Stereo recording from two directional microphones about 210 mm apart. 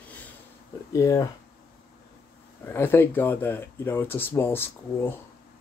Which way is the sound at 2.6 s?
10° left (ahead or behind).